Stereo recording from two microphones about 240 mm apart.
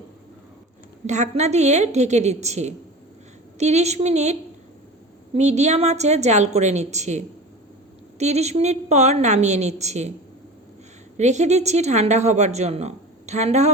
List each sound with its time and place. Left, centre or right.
1.0 s speech: right
11.2 s speech: right